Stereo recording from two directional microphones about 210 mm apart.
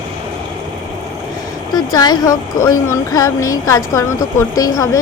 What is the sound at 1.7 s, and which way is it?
Speech, 20° left (ahead or behind).